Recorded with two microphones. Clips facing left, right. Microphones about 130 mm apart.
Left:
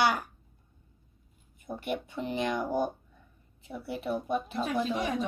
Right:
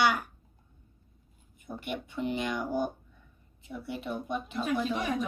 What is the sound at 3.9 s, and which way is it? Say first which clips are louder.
A woman's voice: left 4 dB; 35° left (ahead or behind).